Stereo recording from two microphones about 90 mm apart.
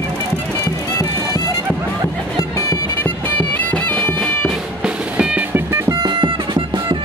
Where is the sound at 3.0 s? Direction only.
15° left (ahead or behind).